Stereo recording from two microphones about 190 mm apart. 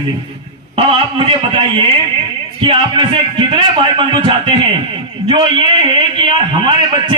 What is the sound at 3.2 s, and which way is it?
A man's voice, 25° right (ahead or behind).